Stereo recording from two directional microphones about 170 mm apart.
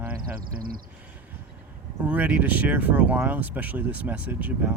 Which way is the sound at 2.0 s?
10° right (ahead or behind).